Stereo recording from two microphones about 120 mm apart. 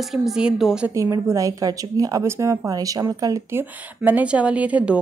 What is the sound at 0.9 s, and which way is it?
Speech, 25° right (ahead or behind).